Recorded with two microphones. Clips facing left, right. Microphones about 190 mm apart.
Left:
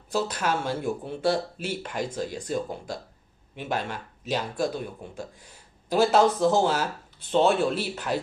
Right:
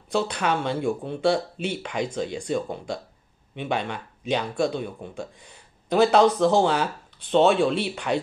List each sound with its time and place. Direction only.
0.1 s speech: 5° left (ahead or behind)
1.8 s speech: 75° right (ahead or behind)
2.0 s speech: 5° left (ahead or behind)